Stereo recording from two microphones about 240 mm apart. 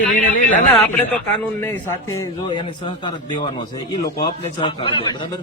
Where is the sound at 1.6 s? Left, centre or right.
Centre.